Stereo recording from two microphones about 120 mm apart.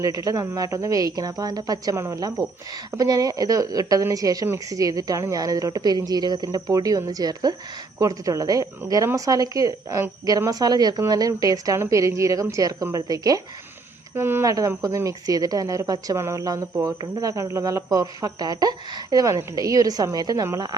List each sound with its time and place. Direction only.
0.0 s speech: 30° right (ahead or behind)
14.2 s speech: 20° right (ahead or behind)